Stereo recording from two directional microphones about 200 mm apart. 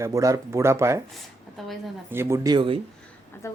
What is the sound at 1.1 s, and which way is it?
Speech, centre (ahead or behind).